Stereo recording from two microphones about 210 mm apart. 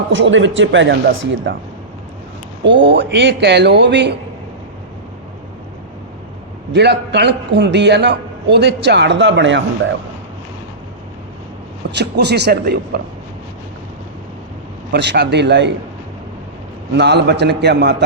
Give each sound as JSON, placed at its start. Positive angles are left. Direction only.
{"t": 0.1, "sound": "a man's voice", "side_deg": -60}
{"t": 2.8, "sound": "a man's voice", "side_deg": -55}
{"t": 6.7, "sound": "a man's voice", "side_deg": -55}
{"t": 11.9, "sound": "a man's voice", "side_deg": -55}
{"t": 14.9, "sound": "a man's voice", "side_deg": -55}
{"t": 16.9, "sound": "a man's voice", "side_deg": -55}